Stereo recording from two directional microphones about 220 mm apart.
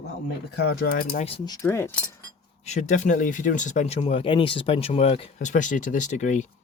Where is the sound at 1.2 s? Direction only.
15° left (ahead or behind).